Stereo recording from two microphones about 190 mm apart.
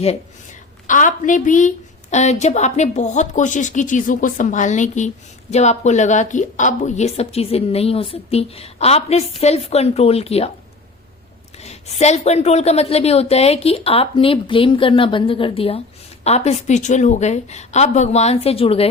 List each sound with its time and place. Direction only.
0.9 s a woman's voice: 45° left (ahead or behind)
11.5 s a woman's voice: 35° left (ahead or behind)